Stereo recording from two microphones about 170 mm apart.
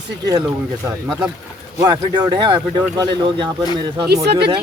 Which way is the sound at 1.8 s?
25° right (ahead or behind).